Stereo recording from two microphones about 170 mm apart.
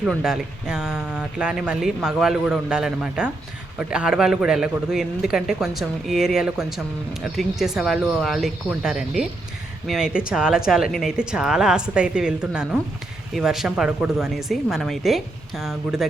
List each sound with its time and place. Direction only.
0.0 s a man's voice: 5° right (ahead or behind)